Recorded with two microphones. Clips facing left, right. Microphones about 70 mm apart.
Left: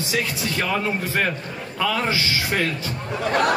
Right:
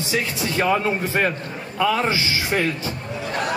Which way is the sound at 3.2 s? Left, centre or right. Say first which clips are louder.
Left 6 dB; left.